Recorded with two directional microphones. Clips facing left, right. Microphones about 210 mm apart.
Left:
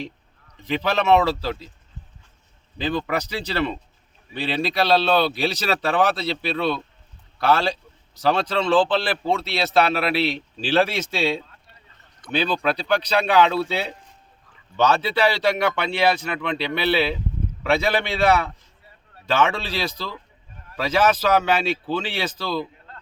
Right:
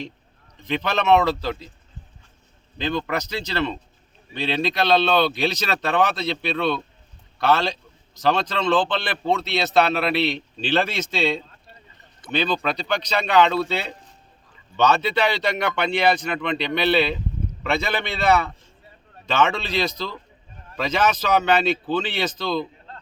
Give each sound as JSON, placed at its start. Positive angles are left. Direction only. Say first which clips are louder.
{"t": 0.7, "sound": "speech", "louder": "even", "side_deg": 5}
{"t": 2.7, "sound": "a man's voice", "louder": "left 1 dB", "side_deg": 5}
{"t": 14.8, "sound": "a man's voice", "louder": "even", "side_deg": 5}
{"t": 19.3, "sound": "speech", "louder": "even", "side_deg": 5}